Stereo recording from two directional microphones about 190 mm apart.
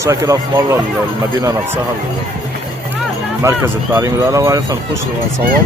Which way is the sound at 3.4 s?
15° right (ahead or behind).